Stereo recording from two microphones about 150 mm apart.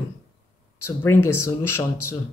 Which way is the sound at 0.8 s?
15° left (ahead or behind).